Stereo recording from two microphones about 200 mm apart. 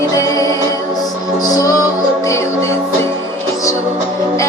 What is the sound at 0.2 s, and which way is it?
Music, 15° left (ahead or behind).